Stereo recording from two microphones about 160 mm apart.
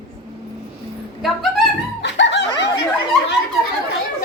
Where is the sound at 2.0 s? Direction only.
90° left.